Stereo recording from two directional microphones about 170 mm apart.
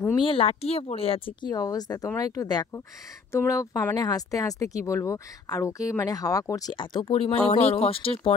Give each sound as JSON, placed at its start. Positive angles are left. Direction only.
{"t": 0.2, "sound": "speech", "side_deg": 35}